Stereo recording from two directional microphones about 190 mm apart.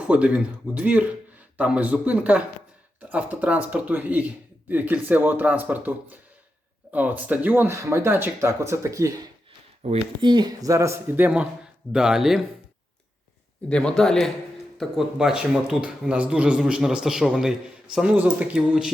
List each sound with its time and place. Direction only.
0.0 s speech: 5° right (ahead or behind)
9.8 s speech: 30° right (ahead or behind); by 12.4 s centre (ahead or behind)
13.7 s speech: 5° left (ahead or behind)